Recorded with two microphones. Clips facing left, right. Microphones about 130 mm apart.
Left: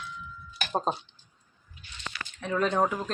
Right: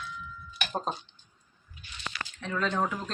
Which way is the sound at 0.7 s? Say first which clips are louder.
Left 5 dB; 35° left (ahead or behind).